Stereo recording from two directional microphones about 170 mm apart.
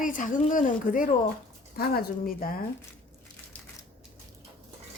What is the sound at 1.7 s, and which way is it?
Speech, 60° left (ahead or behind).